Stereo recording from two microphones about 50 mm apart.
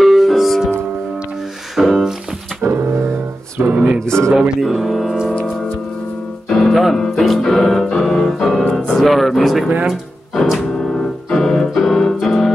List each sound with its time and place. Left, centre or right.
0.0 s music: centre
1.8 s music: centre
2.6 s music: right
3.7 s music: right
4.4 s speech: centre
6.5 s piano: centre
8.0 s keyboard: centre
8.9 s speech: centre
10.3 s music: centre
10.8 s keyboard: centre